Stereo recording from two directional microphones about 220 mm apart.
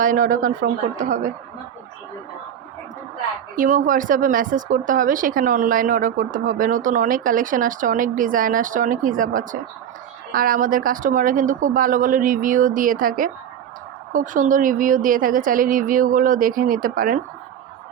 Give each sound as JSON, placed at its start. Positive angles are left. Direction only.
{"t": 0.0, "sound": "speech", "side_deg": -35}
{"t": 3.5, "sound": "speech", "side_deg": -35}